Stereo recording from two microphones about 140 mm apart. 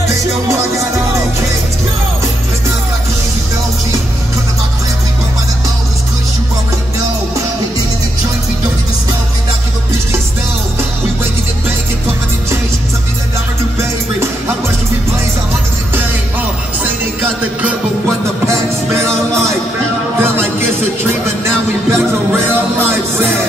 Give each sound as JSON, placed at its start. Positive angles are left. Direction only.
{"t": 20.2, "sound": "music", "side_deg": -15}
{"t": 21.9, "sound": "music", "side_deg": -15}